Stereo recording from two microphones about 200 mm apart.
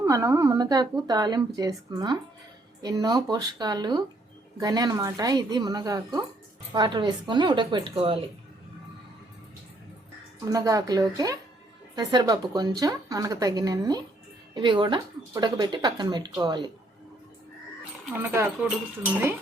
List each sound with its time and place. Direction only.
0.0 s speech: 10° right (ahead or behind); by 8.2 s 25° right (ahead or behind)
10.5 s speech: 20° right (ahead or behind)
18.1 s speech: 10° right (ahead or behind)